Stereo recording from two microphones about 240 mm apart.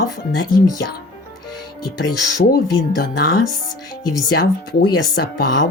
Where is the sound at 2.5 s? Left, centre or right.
Left.